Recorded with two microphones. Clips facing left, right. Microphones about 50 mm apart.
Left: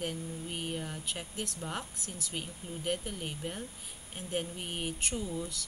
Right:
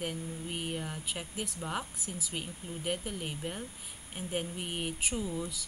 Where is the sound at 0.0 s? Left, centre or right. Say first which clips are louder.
Even; centre.